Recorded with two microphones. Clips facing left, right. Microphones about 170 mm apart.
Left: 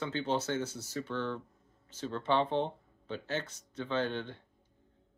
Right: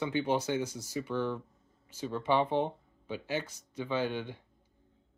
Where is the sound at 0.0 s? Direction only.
10° right (ahead or behind).